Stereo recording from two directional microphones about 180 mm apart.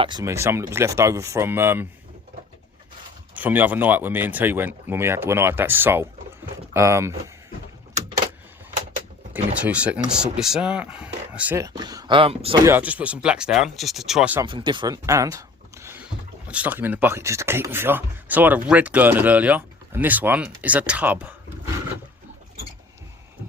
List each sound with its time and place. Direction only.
0.0 s speech: 25° right (ahead or behind)
3.3 s speech: 10° right (ahead or behind)
9.6 s speech: 5° right (ahead or behind); by 12.5 s 30° right (ahead or behind)
12.5 s speech: 15° right (ahead or behind)
14.4 s speech: 25° right (ahead or behind); by 21.3 s 10° right (ahead or behind)